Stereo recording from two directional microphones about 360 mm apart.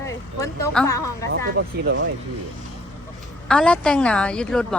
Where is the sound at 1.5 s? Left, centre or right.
Right.